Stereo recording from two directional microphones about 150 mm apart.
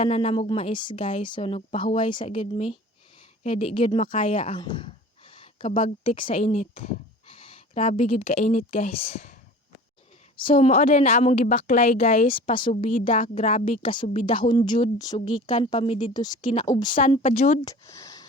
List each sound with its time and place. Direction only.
0.0 s speech: 45° left (ahead or behind)
6.4 s speech: 45° left (ahead or behind)
10.3 s speech: 40° left (ahead or behind)
12.3 s speech: 35° left (ahead or behind)
12.7 s speech: 55° left (ahead or behind)
16.1 s speech: 25° left (ahead or behind)
17.1 s speech: 35° left (ahead or behind)
17.7 s speech: 20° left (ahead or behind)